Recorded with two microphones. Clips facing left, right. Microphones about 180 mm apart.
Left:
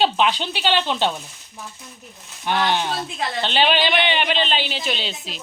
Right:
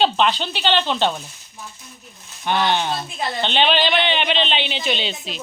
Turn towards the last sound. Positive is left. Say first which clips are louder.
# right 3 dB
turn(degrees=5)  # may be behind; listen again after turning